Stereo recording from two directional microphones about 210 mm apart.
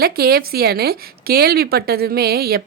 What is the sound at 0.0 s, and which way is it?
A woman's voice, 45° right (ahead or behind).